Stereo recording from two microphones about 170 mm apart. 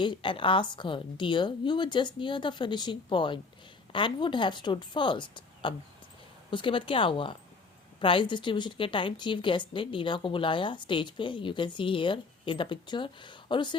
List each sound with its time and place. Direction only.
0.0 s a woman's voice: 30° left (ahead or behind)